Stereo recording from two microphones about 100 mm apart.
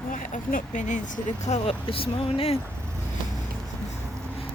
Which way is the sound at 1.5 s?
70° left (ahead or behind).